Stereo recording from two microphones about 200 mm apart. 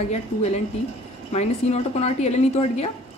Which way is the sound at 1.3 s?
35° left (ahead or behind).